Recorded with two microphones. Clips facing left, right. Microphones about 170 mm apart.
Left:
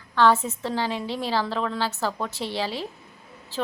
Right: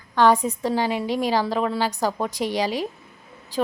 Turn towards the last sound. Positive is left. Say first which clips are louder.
# right 5 dB
turn(degrees=-15)  # may be behind; listen again after turning